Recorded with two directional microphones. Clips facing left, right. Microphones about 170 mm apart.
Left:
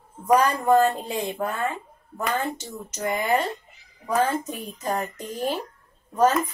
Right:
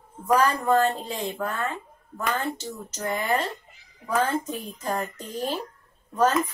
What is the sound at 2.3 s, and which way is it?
A woman's voice, 15° left (ahead or behind).